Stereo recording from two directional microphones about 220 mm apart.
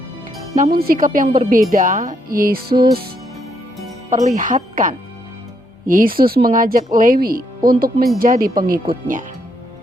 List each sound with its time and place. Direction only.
0.5 s speech: 40° right (ahead or behind)
4.1 s speech: 35° right (ahead or behind)